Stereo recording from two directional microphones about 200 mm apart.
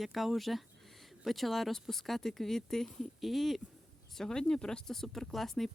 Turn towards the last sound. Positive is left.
turn(degrees=0)  # may be behind; listen again after turning